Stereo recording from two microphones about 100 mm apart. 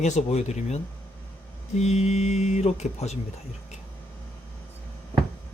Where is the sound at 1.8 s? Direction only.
90° left.